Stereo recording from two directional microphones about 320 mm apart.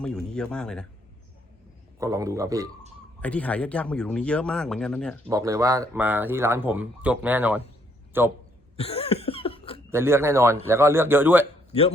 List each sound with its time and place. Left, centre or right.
0.0 s speech: centre
2.0 s a man's voice: centre
3.2 s speech: centre
5.3 s speech: centre
8.7 s cough: centre
9.9 s speech: centre